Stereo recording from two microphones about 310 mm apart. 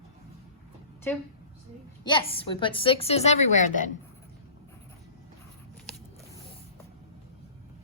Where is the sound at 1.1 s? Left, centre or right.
Centre; by 3.9 s left.